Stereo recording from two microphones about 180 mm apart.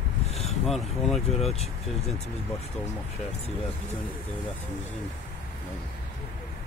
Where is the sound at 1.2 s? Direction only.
35° left (ahead or behind).